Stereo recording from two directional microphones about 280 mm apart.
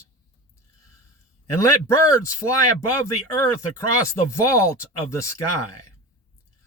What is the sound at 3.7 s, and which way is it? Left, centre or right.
Speech, centre.